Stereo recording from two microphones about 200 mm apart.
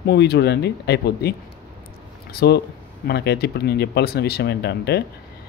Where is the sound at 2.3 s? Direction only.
55° left (ahead or behind).